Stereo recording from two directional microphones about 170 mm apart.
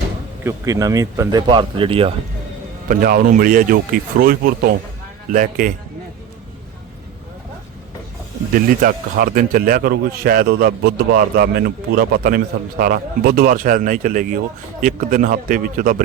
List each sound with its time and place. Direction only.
0.4 s speech: 20° right (ahead or behind)
2.9 s speech: 55° right (ahead or behind)
8.5 s speech: 55° right (ahead or behind)